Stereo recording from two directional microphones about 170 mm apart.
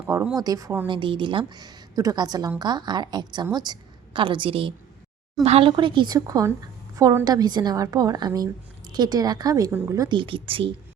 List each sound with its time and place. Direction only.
0.3 s a woman's voice: 20° right (ahead or behind)
0.9 s a woman's voice: 30° right (ahead or behind)